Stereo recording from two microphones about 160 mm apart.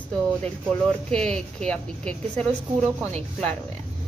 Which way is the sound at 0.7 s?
5° left (ahead or behind).